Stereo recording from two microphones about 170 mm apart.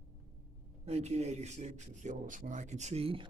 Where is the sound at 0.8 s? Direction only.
40° right (ahead or behind).